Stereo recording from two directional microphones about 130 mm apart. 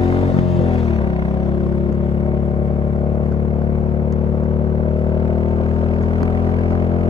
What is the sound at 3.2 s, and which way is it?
Vehicle, 35° left (ahead or behind).